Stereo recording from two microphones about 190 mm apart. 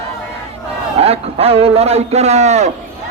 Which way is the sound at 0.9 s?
35° right (ahead or behind).